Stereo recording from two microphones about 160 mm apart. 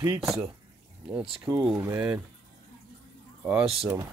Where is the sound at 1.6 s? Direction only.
10° right (ahead or behind).